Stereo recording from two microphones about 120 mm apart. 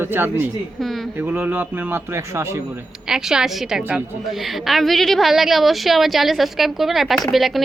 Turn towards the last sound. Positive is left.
turn(degrees=0)  # may be behind; listen again after turning